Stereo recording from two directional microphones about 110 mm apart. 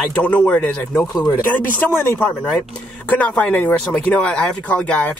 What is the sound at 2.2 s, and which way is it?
Speech, 5° left (ahead or behind).